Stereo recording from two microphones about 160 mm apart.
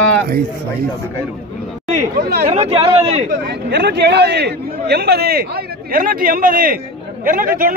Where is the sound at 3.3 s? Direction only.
90° right.